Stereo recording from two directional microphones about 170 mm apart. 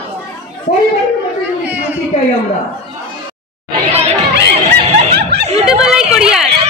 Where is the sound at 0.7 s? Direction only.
45° left (ahead or behind).